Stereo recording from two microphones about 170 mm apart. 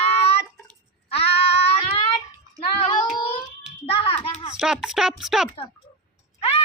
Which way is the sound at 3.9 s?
35° left (ahead or behind).